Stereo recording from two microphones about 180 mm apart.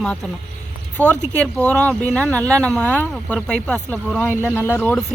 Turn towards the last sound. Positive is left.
turn(degrees=5)  # may be behind; listen again after turning